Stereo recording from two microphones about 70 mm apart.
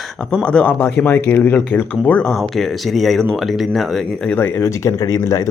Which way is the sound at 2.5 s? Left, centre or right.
Centre.